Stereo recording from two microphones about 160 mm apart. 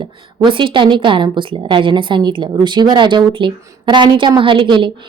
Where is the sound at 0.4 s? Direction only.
30° right (ahead or behind).